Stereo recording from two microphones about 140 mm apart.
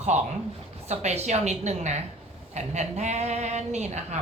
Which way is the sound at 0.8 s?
50° right (ahead or behind).